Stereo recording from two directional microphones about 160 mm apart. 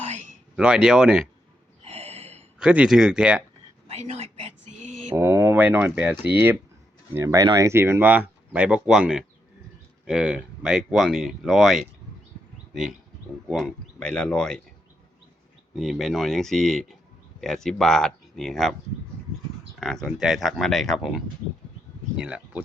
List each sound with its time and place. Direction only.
0.5 s speech: 5° right (ahead or behind)
1.8 s gasp: 40° right (ahead or behind)
2.6 s speech: 5° right (ahead or behind)
3.8 s a sound: 40° right (ahead or behind)
5.1 s speech: 15° right (ahead or behind); by 14.6 s 5° left (ahead or behind)
15.7 s speech: centre (ahead or behind)
19.8 s speech: centre (ahead or behind)